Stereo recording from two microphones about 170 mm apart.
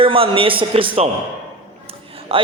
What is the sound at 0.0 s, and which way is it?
A man's voice, 30° right (ahead or behind).